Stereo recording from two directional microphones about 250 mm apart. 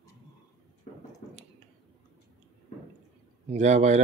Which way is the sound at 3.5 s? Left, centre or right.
Right.